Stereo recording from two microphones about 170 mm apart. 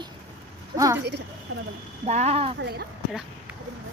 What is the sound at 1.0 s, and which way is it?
Speech, 85° right.